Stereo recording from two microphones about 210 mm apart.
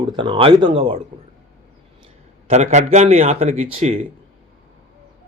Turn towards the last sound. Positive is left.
turn(degrees=-30)  # may be behind; listen again after turning